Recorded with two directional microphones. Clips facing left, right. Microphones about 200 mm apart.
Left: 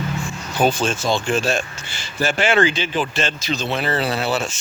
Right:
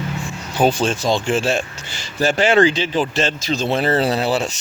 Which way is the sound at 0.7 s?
35° right (ahead or behind).